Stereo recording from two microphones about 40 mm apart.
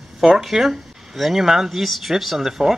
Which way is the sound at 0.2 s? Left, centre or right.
Centre.